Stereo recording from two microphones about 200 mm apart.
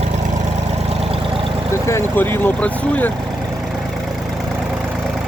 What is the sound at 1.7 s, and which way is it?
Speech, 15° left (ahead or behind).